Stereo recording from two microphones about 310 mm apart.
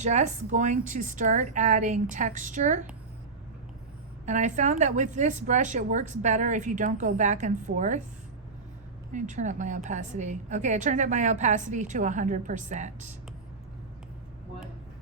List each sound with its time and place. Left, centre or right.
0.0 s a woman's voice: right
4.3 s a woman's voice: right
9.1 s a woman's voice: right